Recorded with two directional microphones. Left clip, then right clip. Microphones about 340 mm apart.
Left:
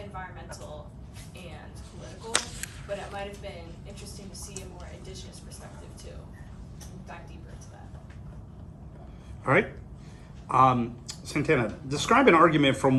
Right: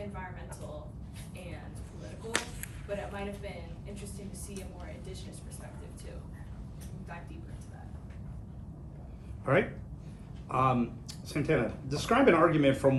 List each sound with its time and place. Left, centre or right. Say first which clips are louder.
2.3 s whip: left 5 dB; centre
9.4 s a man's voice: left 4 dB; left